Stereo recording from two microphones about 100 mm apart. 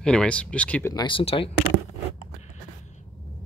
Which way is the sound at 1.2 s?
65° left (ahead or behind).